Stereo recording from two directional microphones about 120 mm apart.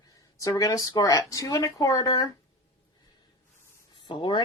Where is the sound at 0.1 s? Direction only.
25° left (ahead or behind).